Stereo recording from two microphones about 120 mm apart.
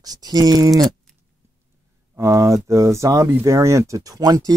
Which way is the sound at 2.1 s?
25° right (ahead or behind).